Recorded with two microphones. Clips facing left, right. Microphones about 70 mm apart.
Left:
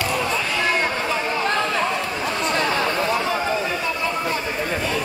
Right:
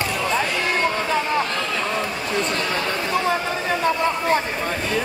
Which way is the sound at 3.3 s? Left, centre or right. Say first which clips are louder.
Even; right.